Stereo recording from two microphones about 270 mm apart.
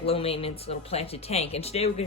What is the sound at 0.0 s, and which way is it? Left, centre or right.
Speech, left.